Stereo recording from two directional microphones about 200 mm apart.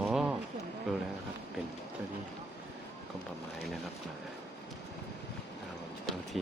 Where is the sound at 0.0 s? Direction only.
5° right (ahead or behind).